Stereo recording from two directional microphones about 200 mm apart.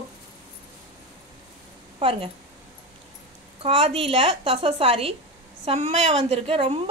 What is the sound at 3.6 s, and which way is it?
Speech, 30° right (ahead or behind).